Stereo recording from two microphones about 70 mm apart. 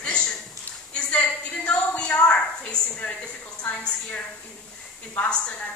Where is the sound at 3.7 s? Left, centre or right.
Centre.